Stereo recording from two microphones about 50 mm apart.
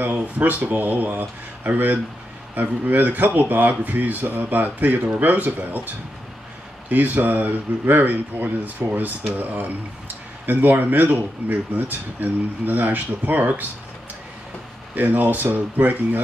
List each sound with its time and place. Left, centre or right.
0.0 s speech: right
6.9 s speech: right
15.0 s speech: right